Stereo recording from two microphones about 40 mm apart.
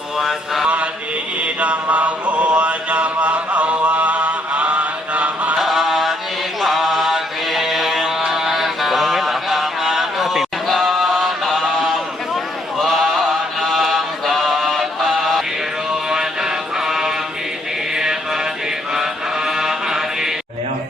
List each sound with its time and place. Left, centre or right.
0.2 s a sound: centre
1.4 s mantra: right
5.5 s music: centre
6.6 s mantra: centre
15.9 s music: centre
17.9 s mantra: centre
19.5 s mantra: centre